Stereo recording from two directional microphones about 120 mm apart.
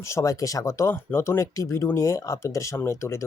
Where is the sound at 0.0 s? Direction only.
25° left (ahead or behind).